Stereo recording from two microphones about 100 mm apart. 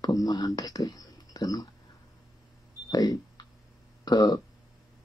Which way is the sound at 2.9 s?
40° left (ahead or behind).